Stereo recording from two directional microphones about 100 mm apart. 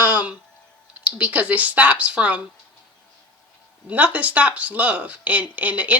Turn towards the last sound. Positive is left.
turn(degrees=-15)  # may be behind; listen again after turning